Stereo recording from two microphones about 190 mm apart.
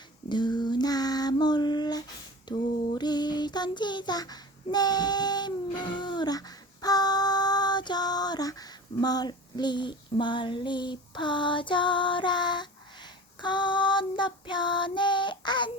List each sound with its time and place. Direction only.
0.3 s child singing: 25° left (ahead or behind)